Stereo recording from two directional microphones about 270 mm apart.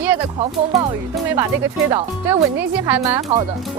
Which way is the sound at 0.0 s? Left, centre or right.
Centre.